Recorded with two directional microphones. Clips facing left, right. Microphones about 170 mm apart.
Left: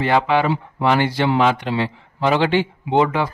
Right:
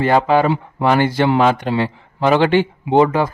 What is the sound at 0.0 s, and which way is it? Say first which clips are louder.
A man's voice: right 3 dB; 40° right (ahead or behind).